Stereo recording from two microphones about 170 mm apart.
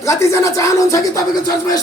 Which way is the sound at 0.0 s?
20° left (ahead or behind).